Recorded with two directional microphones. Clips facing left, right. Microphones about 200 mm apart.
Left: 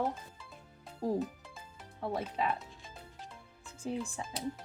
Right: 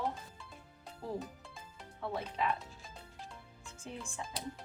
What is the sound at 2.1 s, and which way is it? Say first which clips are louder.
Speech: left 2 dB; 35° left (ahead or behind).